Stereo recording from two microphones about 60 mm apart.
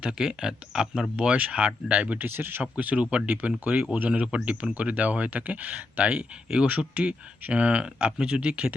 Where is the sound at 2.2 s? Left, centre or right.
Right.